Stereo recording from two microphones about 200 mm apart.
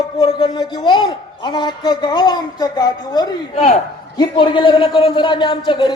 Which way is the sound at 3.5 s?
35° left (ahead or behind).